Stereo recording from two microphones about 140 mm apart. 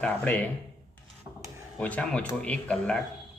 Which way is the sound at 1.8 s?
10° left (ahead or behind).